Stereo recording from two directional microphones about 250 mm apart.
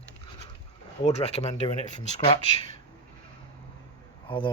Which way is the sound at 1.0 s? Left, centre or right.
Left.